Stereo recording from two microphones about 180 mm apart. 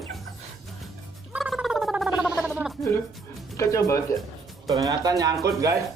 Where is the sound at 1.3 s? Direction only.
5° right (ahead or behind).